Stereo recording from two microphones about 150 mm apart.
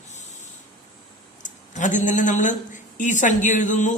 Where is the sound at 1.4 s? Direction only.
55° left (ahead or behind).